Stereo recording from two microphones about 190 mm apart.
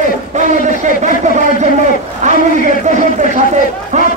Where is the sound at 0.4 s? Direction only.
40° right (ahead or behind).